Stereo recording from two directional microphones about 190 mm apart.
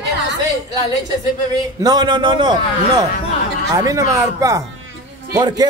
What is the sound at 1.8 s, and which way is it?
A man's voice, 20° right (ahead or behind).